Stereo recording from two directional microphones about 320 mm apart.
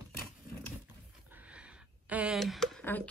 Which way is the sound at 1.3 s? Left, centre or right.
Centre.